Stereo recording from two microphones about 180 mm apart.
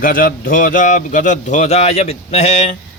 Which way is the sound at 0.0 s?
50° left (ahead or behind).